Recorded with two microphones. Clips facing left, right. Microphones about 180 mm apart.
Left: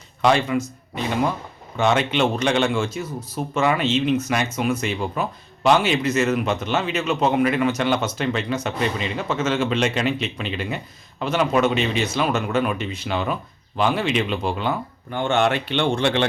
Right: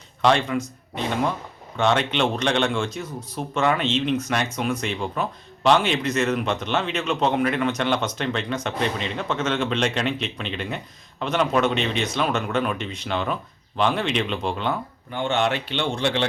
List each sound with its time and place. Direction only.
0.2 s speech: 5° left (ahead or behind)
15.1 s speech: 45° left (ahead or behind)